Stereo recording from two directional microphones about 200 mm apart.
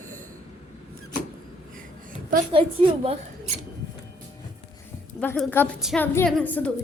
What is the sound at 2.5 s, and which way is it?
Speech, 25° right (ahead or behind).